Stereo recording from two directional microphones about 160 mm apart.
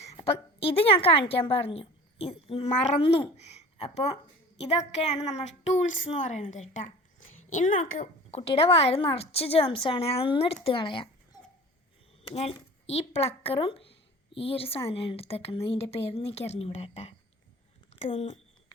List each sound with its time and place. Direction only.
0.2 s a woman's voice: 35° left (ahead or behind)
12.3 s speech: 40° left (ahead or behind)